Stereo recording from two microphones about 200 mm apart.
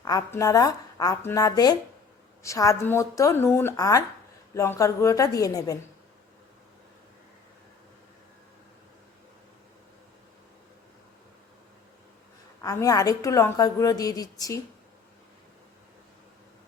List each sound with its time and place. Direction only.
0.0 s a woman's voice: 15° left (ahead or behind)
12.6 s a woman's voice: 15° left (ahead or behind)